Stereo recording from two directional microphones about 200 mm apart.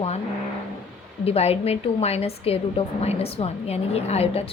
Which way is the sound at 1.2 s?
30° left (ahead or behind).